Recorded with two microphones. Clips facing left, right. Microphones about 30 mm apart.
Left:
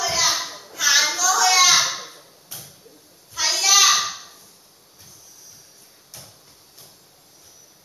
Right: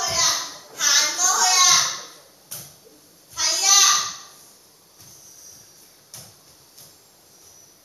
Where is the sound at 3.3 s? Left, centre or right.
Centre.